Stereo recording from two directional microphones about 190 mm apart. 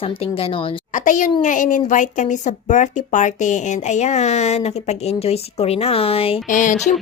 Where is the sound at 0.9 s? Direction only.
40° left (ahead or behind).